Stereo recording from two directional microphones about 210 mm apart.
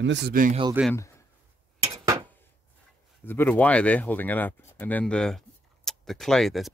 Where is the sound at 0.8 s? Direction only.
5° right (ahead or behind).